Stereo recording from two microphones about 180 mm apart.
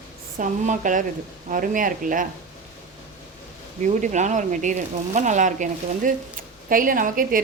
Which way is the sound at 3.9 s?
40° right (ahead or behind).